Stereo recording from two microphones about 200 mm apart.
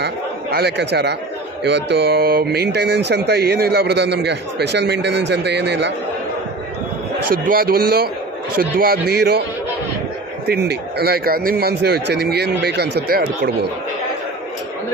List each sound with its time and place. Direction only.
0.5 s speech: 55° right (ahead or behind)
7.4 s a man's voice: 45° right (ahead or behind)
10.4 s a man's voice: 55° right (ahead or behind)